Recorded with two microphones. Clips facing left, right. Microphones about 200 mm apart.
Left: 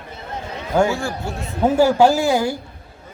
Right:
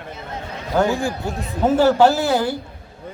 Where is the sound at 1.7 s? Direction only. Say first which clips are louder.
Even; 10° left (ahead or behind).